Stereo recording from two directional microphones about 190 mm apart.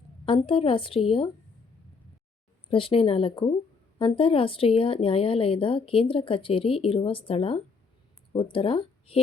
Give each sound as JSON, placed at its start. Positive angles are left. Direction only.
{"t": 0.3, "sound": "speech", "side_deg": 30}
{"t": 2.6, "sound": "speech", "side_deg": 25}